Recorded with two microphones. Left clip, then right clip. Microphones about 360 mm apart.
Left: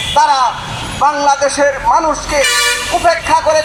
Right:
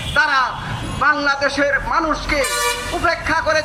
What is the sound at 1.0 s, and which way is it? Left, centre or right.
Speech, centre.